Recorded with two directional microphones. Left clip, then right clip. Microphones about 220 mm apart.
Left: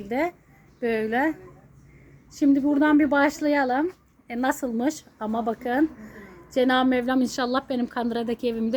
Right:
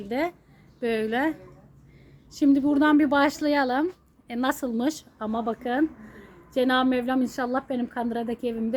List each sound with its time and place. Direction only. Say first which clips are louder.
0.0 s a woman's voice: left 2 dB; 10° right (ahead or behind)
2.4 s speech: even; 5° right (ahead or behind)